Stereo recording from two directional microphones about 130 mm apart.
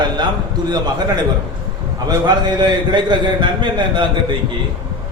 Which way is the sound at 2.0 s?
35° right (ahead or behind).